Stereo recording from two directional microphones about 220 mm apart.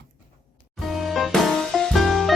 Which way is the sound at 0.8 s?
Centre (ahead or behind).